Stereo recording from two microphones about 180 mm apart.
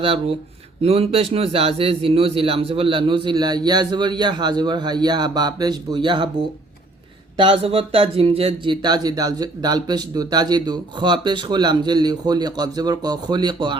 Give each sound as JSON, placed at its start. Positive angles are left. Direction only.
{"t": 0.0, "sound": "speech", "side_deg": -30}
{"t": 7.3, "sound": "speech", "side_deg": -30}